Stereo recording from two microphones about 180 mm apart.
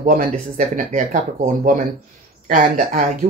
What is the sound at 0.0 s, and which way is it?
Speech, 45° right (ahead or behind).